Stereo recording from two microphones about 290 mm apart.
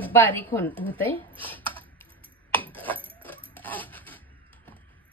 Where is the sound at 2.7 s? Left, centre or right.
Centre.